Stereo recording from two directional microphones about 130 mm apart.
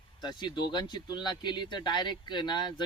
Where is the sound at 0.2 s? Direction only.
35° left (ahead or behind).